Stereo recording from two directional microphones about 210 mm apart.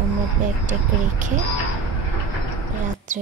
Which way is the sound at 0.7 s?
35° right (ahead or behind).